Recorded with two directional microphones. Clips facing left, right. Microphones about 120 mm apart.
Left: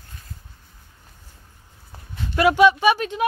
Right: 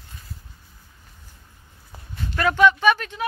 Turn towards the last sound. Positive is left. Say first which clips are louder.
# left 1 dB
turn(degrees=15)  # may be behind; listen again after turning